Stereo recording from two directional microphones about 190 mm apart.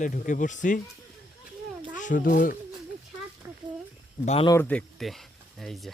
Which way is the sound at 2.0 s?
45° left (ahead or behind).